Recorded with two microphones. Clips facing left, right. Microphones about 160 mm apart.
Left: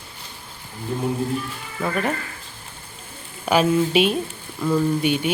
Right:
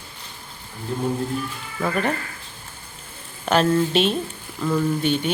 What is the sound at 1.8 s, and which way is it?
Speech, centre (ahead or behind).